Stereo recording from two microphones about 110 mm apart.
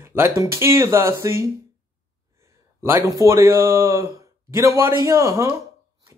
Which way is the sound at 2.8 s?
25° right (ahead or behind).